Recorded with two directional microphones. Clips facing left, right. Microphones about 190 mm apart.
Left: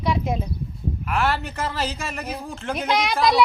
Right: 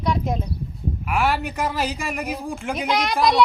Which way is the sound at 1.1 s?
10° right (ahead or behind).